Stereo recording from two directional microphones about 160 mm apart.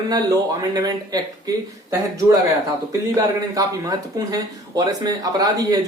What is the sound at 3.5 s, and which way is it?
Speech, 20° right (ahead or behind).